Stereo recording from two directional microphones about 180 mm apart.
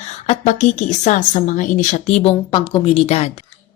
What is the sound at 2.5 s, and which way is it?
Speech, 25° left (ahead or behind).